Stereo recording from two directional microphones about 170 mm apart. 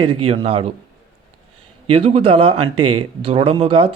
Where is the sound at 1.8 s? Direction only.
35° right (ahead or behind).